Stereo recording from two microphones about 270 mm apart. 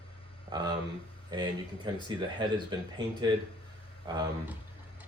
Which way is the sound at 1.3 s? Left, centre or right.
Centre.